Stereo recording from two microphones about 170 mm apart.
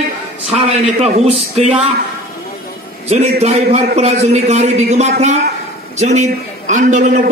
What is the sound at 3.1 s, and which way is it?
A man's voice, 40° right (ahead or behind).